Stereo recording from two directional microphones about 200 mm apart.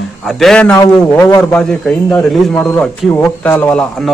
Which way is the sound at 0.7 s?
15° left (ahead or behind).